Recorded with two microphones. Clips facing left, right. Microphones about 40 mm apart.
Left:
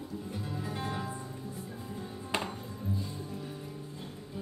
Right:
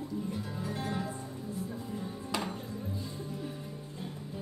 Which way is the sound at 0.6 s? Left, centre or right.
Centre.